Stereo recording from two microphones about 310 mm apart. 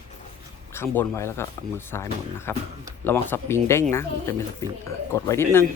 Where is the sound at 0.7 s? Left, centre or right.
Centre.